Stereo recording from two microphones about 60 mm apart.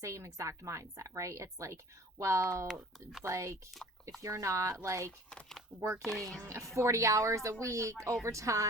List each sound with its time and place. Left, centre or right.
0.0 s speech: right
2.7 s speech: centre
3.2 s speech: right
6.0 s speech: centre
6.4 s speech: right